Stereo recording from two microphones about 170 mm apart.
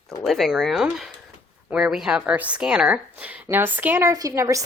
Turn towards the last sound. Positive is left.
turn(degrees=-20)  # may be behind; listen again after turning